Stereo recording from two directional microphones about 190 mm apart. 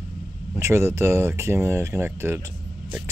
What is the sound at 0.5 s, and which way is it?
Speech, 15° right (ahead or behind).